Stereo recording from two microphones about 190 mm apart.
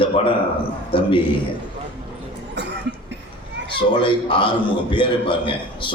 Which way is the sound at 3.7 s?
25° left (ahead or behind).